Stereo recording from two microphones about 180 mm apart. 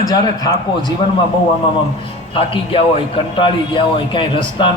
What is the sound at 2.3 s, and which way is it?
A man's voice, 30° left (ahead or behind).